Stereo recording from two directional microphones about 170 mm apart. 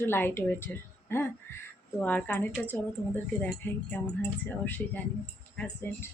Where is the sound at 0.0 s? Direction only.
15° left (ahead or behind).